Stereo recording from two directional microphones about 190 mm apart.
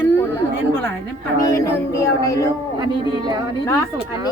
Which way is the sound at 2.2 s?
15° left (ahead or behind).